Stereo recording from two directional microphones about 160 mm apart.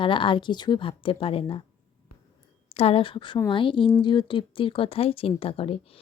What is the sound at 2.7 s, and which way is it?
Speech, 35° left (ahead or behind).